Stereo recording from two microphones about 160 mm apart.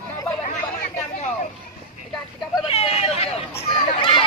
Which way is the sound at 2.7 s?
40° left (ahead or behind).